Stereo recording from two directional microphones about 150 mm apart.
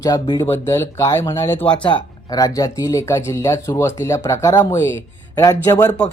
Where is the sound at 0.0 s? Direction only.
25° left (ahead or behind).